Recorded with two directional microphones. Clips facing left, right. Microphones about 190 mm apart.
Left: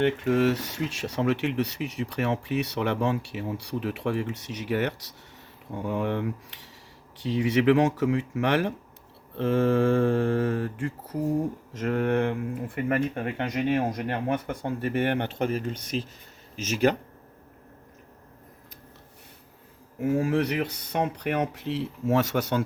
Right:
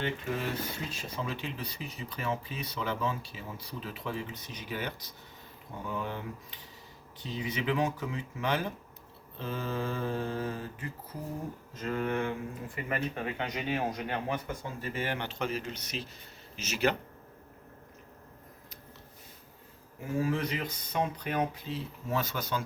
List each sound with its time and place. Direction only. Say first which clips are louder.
0.0 s speech: left 11 dB; 75° left (ahead or behind); by 16.9 s 45° left (ahead or behind)
20.0 s speech: left 7 dB; 65° left (ahead or behind)